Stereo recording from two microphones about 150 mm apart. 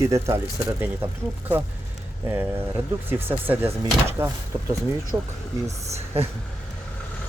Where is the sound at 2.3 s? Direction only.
15° right (ahead or behind).